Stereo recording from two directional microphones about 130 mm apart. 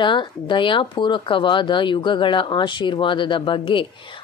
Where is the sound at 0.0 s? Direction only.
40° left (ahead or behind).